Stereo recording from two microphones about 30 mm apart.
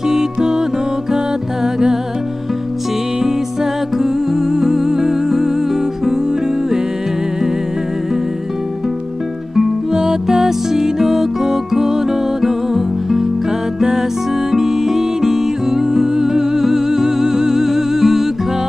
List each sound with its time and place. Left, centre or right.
0.1 s music: right
4.0 s music: centre
10.4 s music: centre
14.5 s music: centre